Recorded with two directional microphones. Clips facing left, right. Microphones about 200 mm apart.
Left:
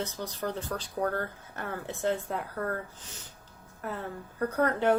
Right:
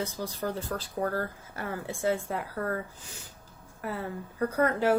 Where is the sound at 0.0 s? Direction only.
10° right (ahead or behind).